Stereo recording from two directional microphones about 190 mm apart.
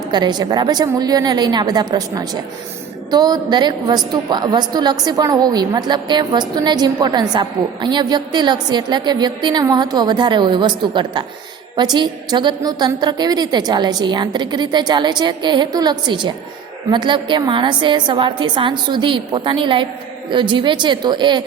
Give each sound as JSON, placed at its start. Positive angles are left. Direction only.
{"t": 0.1, "sound": "a woman's voice", "side_deg": -20}